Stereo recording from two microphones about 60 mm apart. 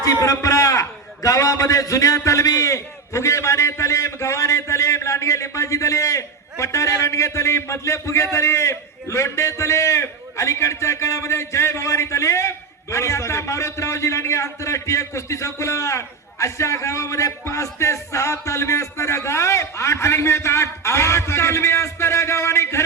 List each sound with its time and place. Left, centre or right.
0.0 s a man's voice: left